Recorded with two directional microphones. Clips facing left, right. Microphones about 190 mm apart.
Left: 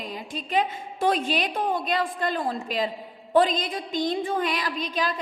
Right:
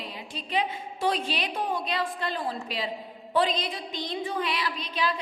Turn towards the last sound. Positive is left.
turn(degrees=45)  # may be behind; listen again after turning